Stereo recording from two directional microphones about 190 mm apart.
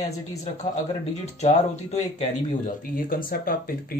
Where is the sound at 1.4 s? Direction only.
35° left (ahead or behind).